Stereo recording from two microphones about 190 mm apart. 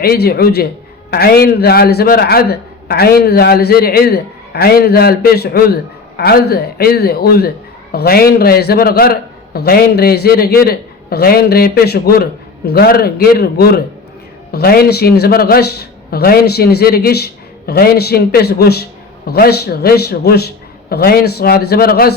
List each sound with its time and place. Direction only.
0.0 s a man's voice: 55° left (ahead or behind)